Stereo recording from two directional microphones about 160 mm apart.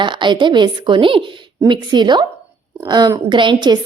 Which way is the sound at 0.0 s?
30° right (ahead or behind).